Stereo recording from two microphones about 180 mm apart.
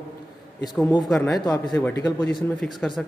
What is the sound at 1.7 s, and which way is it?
Speech, 15° left (ahead or behind).